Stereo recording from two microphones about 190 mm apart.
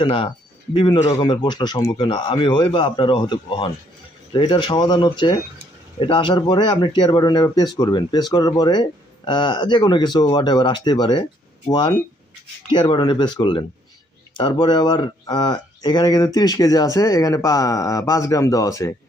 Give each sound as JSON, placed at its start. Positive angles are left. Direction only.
{"t": 0.0, "sound": "speech", "side_deg": 30}